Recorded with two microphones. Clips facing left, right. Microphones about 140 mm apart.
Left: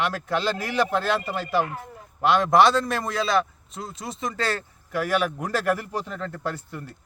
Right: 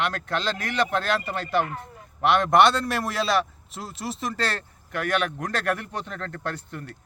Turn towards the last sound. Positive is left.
turn(degrees=5)  # may be behind; listen again after turning